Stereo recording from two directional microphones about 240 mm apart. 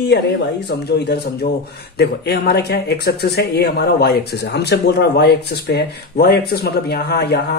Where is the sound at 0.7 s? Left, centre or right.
Left.